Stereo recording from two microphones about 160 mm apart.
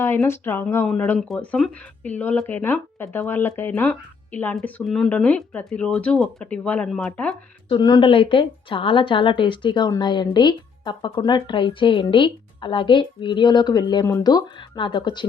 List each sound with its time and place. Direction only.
0.3 s speech: 15° left (ahead or behind)
7.7 s a woman's voice: 25° left (ahead or behind)